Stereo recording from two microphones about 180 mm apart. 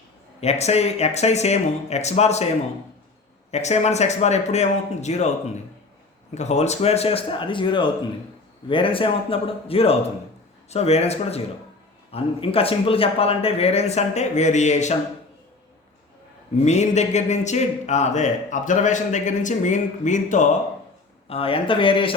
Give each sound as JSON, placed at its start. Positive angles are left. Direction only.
{"t": 0.3, "sound": "a man's voice", "side_deg": 35}
{"t": 3.5, "sound": "a man's voice", "side_deg": 40}
{"t": 6.3, "sound": "a man's voice", "side_deg": 40}
{"t": 16.6, "sound": "a man's voice", "side_deg": 40}
{"t": 21.2, "sound": "speech", "side_deg": 30}